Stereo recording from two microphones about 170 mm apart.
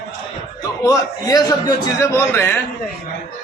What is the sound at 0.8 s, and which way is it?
A man's voice, 20° left (ahead or behind).